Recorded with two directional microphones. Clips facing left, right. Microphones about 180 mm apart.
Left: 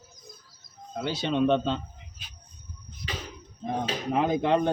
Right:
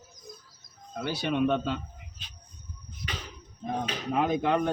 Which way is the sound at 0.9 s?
20° left (ahead or behind).